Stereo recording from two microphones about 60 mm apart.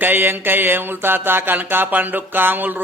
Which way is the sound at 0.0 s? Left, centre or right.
Right.